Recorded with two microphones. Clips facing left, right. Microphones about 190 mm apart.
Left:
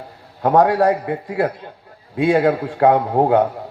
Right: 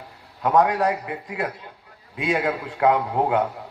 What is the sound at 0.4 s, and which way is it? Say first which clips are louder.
A man's voice: left 5 dB; 35° left (ahead or behind).